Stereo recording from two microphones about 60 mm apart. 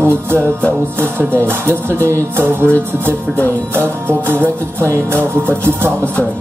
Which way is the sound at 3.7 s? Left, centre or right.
Right.